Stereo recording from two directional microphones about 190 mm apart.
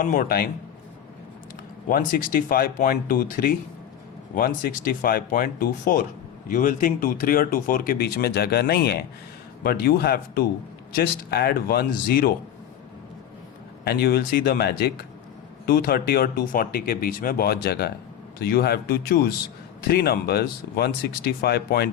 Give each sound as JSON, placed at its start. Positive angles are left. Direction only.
{"t": 0.0, "sound": "speech", "side_deg": 45}
{"t": 1.9, "sound": "speech", "side_deg": 45}
{"t": 13.8, "sound": "speech", "side_deg": 55}